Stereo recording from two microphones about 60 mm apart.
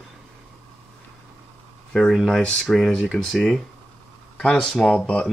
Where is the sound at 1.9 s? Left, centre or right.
Centre.